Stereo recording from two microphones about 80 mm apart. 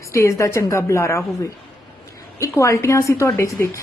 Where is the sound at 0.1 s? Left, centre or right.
Left.